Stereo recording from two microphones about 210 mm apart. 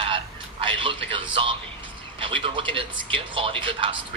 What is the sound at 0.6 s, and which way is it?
Speech, 25° right (ahead or behind).